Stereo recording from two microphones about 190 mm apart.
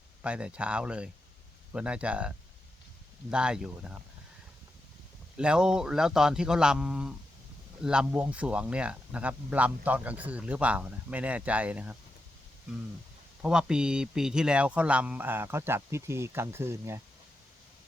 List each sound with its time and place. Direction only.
0.2 s speech: 5° right (ahead or behind)
5.4 s speech: 5° right (ahead or behind)
13.4 s speech: 5° right (ahead or behind)